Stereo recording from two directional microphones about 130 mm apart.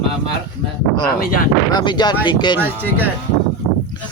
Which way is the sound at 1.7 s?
35° left (ahead or behind).